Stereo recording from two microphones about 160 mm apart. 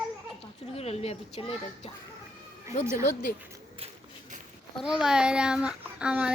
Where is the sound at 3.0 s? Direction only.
65° left (ahead or behind).